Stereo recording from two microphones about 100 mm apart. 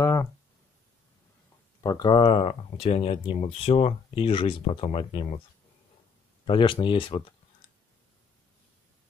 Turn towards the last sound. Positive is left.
turn(degrees=55)  # may be behind; listen again after turning